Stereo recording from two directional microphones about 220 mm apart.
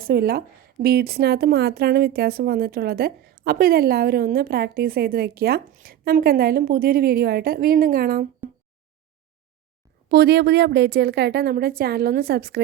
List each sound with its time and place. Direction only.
0.0 s a woman's voice: 45° right (ahead or behind)
10.1 s a woman's voice: 45° right (ahead or behind)